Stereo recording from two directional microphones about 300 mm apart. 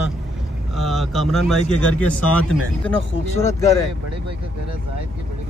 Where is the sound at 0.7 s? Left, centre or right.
Centre.